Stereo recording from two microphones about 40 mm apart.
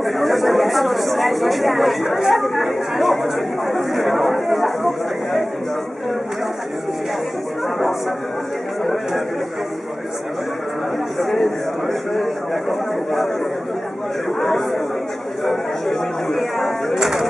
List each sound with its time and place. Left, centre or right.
0.0 s speech: centre
11.1 s speech: centre
14.4 s speech: centre